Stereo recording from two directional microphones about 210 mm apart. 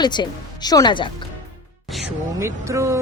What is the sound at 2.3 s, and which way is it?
Speech, 15° right (ahead or behind).